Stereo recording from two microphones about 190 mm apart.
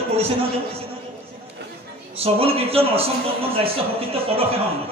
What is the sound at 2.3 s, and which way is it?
Speech, 30° right (ahead or behind).